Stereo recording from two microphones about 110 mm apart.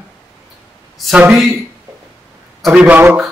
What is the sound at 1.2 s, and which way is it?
Speech, 15° right (ahead or behind).